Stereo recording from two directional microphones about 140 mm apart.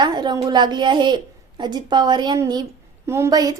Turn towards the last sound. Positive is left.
turn(degrees=-25)  # may be behind; listen again after turning